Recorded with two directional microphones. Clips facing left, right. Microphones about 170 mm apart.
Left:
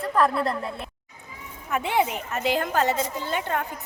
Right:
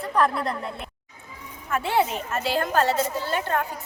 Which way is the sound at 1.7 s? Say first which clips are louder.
Right 1 dB; 15° left (ahead or behind).